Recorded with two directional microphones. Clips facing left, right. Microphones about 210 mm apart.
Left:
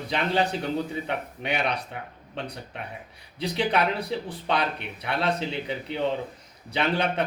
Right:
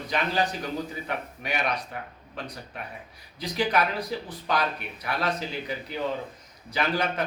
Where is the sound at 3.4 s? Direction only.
30° left (ahead or behind).